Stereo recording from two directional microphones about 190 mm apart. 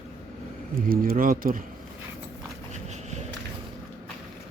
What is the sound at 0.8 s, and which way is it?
Speech, 50° right (ahead or behind).